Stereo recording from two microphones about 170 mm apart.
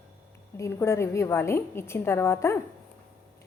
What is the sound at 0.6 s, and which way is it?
A woman's voice, 15° left (ahead or behind).